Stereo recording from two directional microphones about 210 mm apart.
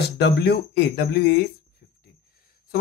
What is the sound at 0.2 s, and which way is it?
Speech, 50° left (ahead or behind).